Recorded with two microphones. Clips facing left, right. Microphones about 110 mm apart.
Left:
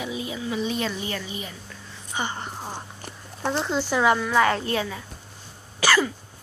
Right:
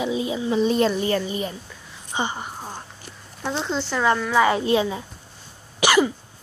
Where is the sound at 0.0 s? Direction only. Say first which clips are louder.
Right 6 dB; 25° right (ahead or behind); by 1.5 s 40° right (ahead or behind).